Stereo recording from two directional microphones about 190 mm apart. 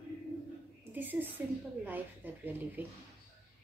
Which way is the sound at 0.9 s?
10° right (ahead or behind).